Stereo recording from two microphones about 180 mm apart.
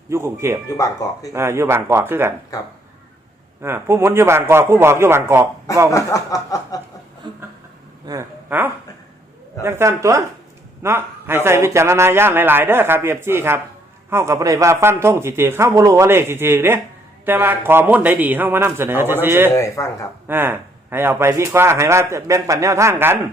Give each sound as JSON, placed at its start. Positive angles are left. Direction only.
{"t": 0.1, "sound": "speech", "side_deg": -15}
{"t": 0.7, "sound": "snicker", "side_deg": 20}
{"t": 1.3, "sound": "speech", "side_deg": -15}
{"t": 3.6, "sound": "speech", "side_deg": -15}
{"t": 5.9, "sound": "snicker", "side_deg": 20}
{"t": 7.2, "sound": "a sound", "side_deg": -25}
{"t": 8.0, "sound": "speech", "side_deg": -15}
{"t": 19.5, "sound": "speech", "side_deg": 15}
{"t": 20.2, "sound": "speech", "side_deg": -10}